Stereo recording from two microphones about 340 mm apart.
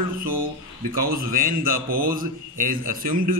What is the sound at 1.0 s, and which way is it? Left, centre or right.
A man's voice, right.